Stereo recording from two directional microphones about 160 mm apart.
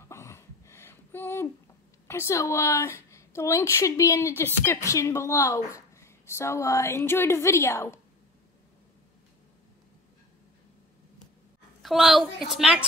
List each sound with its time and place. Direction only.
0.0 s a sound: 15° left (ahead or behind)
2.0 s a woman's voice: 15° left (ahead or behind)
11.8 s a woman's voice: centre (ahead or behind)